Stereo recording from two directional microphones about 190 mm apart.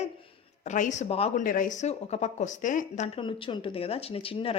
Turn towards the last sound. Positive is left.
turn(degrees=30)  # may be behind; listen again after turning